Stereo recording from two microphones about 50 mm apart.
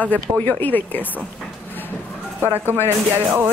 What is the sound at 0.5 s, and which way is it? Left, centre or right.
Speech, left.